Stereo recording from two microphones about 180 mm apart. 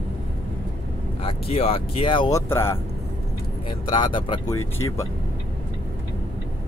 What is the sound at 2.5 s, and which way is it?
Speech, 15° left (ahead or behind).